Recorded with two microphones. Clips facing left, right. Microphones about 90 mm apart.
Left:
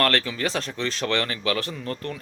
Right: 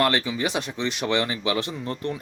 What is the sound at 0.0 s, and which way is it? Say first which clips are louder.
Speech: right 1 dB; 15° right (ahead or behind).